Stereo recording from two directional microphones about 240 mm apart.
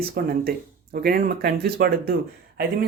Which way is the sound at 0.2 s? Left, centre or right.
Right.